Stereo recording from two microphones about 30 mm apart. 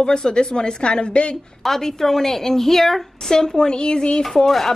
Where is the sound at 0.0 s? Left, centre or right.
Left.